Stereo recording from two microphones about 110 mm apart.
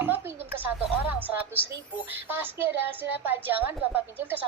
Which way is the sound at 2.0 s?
20° right (ahead or behind).